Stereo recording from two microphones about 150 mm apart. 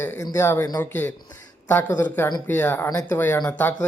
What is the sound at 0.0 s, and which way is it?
Speech, 20° left (ahead or behind).